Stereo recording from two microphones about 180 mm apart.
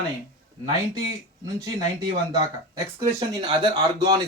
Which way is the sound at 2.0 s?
20° right (ahead or behind).